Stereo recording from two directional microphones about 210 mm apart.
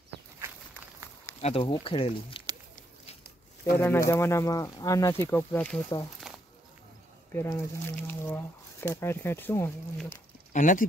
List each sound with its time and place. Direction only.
1.4 s speech: 25° left (ahead or behind)
3.7 s speech: 10° left (ahead or behind)
6.3 s a sound: centre (ahead or behind)
7.4 s speech: 10° left (ahead or behind)
10.5 s speech: 40° left (ahead or behind)